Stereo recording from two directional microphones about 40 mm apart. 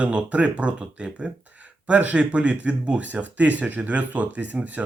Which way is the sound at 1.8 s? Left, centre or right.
Right.